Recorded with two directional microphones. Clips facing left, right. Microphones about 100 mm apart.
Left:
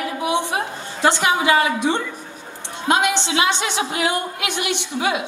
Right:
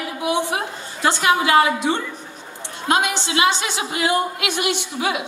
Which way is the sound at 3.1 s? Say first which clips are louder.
Even; 20° left (ahead or behind).